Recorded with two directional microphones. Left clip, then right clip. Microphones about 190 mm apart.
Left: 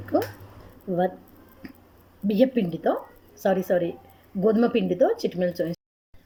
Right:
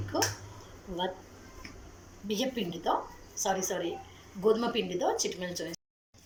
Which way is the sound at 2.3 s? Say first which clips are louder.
Left 10 dB; 55° left (ahead or behind).